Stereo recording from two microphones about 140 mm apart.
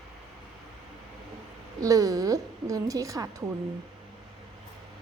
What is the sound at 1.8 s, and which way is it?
A woman's voice, 25° right (ahead or behind).